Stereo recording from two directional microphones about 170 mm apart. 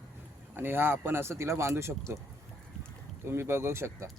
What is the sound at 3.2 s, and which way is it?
Speech, 15° right (ahead or behind).